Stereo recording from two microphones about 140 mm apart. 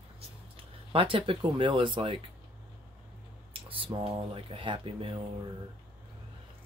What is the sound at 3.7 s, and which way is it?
Speech, 40° right (ahead or behind).